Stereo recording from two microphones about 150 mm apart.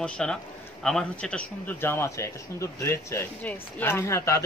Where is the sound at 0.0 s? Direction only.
5° left (ahead or behind).